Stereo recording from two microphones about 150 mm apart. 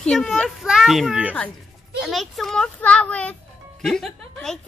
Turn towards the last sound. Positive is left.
turn(degrees=5)  # may be behind; listen again after turning